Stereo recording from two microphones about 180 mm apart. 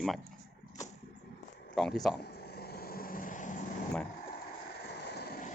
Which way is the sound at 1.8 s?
Centre (ahead or behind).